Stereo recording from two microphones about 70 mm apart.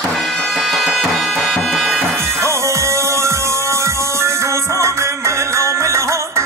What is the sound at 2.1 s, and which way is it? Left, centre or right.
Music, right.